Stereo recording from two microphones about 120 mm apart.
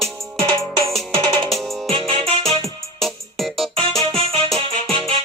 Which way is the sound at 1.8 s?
50° right (ahead or behind).